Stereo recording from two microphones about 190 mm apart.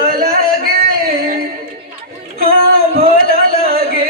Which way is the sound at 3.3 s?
55° right (ahead or behind).